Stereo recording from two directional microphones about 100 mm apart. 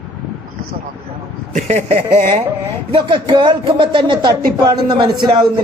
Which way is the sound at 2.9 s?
55° right (ahead or behind).